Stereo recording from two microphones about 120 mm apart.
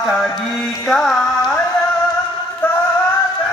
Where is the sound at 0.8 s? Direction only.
5° left (ahead or behind).